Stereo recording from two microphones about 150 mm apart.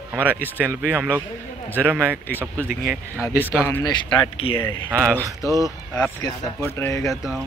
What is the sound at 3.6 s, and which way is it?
Speech, 20° left (ahead or behind).